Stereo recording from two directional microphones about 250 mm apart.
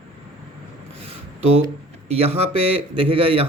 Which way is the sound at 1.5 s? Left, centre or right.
Right.